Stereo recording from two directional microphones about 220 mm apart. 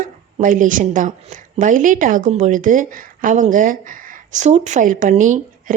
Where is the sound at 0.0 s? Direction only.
35° right (ahead or behind).